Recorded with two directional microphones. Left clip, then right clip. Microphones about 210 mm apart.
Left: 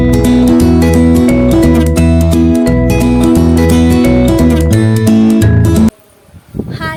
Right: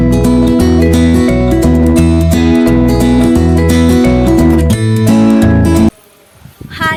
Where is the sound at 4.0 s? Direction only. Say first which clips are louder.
Even; centre (ahead or behind).